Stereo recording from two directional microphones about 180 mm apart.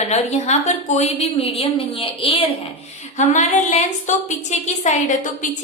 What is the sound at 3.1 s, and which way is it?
A woman's voice, 40° left (ahead or behind).